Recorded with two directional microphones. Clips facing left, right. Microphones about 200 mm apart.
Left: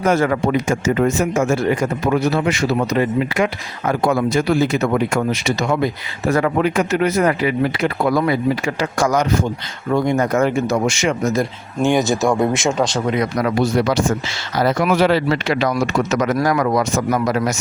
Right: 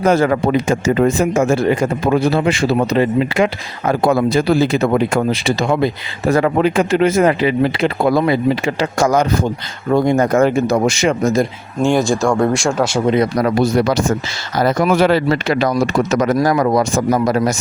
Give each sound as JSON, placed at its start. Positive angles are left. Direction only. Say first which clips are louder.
{"t": 0.0, "sound": "speech", "louder": "right 3 dB", "side_deg": -30}
{"t": 11.8, "sound": "speech", "louder": "right 2 dB", "side_deg": 0}
{"t": 13.1, "sound": "speech", "louder": "right 4 dB", "side_deg": -35}